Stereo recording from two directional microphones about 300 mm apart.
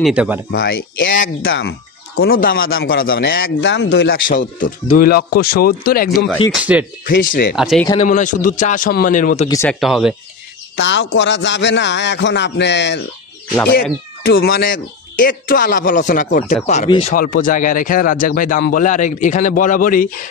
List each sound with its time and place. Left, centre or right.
0.0 s speech: centre
0.5 s a man's voice: left
6.5 s speech: centre
7.1 s speech: left
7.5 s speech: centre
7.9 s speech: left
9.5 s speech: centre
10.8 s a man's voice: left
14.2 s speech: left